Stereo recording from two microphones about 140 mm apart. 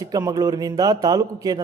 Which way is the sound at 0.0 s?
25° right (ahead or behind).